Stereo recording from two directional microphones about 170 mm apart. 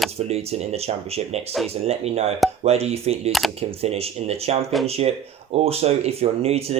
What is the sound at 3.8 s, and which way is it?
Speech, 35° right (ahead or behind).